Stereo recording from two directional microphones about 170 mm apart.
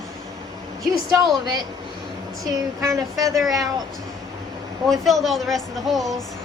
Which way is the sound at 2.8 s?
20° right (ahead or behind).